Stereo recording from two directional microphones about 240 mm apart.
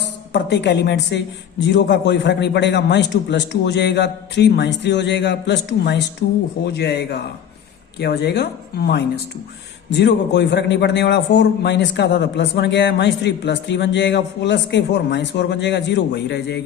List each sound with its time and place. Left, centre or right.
0.0 s a woman's voice: left